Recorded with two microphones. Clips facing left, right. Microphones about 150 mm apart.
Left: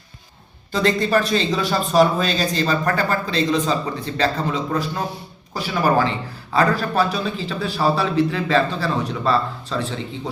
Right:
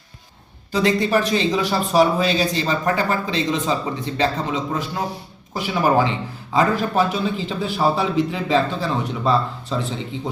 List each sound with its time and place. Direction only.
0.7 s a man's voice: 15° right (ahead or behind)